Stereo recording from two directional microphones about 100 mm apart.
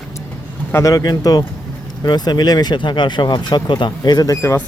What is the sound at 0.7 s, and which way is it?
Speech, 35° left (ahead or behind).